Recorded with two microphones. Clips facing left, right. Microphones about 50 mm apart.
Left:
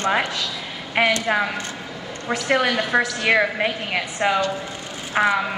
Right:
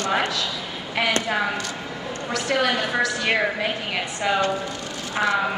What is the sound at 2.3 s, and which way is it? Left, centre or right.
A woman's voice, left.